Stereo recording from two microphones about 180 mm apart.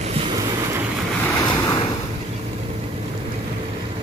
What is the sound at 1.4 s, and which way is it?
Waves, 20° left (ahead or behind).